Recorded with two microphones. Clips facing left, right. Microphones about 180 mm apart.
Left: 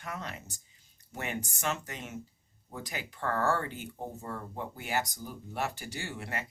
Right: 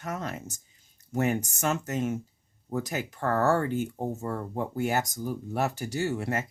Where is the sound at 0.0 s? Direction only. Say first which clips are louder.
Right 6 dB; 45° right (ahead or behind).